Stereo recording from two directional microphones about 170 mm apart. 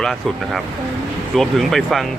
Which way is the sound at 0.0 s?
Centre (ahead or behind).